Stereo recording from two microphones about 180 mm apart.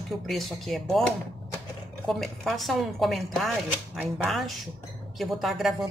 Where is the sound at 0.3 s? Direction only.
Centre (ahead or behind).